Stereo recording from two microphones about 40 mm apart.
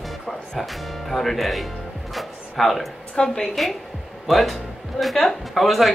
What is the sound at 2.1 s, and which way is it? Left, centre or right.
Music, centre.